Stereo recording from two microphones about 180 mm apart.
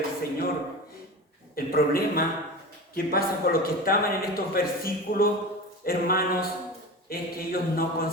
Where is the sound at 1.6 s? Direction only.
55° left (ahead or behind).